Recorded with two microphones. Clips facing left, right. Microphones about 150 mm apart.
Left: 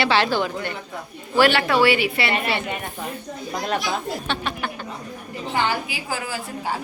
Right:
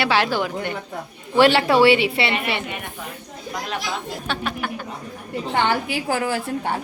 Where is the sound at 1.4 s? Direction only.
25° right (ahead or behind).